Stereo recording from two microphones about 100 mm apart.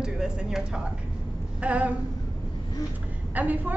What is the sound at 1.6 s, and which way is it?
Speech, 15° right (ahead or behind).